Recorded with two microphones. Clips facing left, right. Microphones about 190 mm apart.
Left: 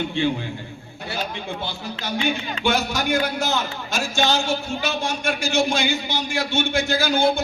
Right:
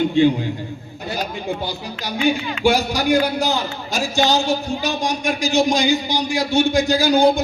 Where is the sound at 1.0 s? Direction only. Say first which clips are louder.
Right 4 dB; 40° right (ahead or behind).